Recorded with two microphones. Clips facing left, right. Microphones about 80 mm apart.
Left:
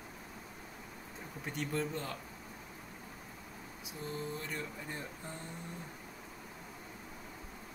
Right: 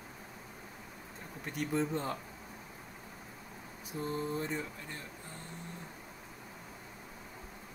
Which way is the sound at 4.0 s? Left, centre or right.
Right.